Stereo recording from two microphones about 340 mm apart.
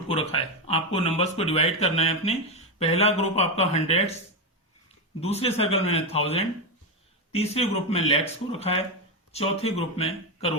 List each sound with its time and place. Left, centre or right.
0.1 s a sound: centre
0.9 s speech: centre
5.2 s speech: centre